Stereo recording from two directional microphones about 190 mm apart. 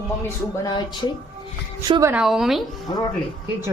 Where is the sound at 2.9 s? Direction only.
20° left (ahead or behind).